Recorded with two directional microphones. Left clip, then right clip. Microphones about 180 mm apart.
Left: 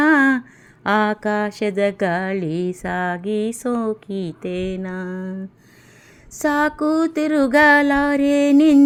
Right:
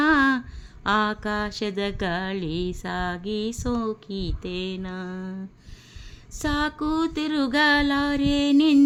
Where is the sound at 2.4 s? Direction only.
45° left (ahead or behind).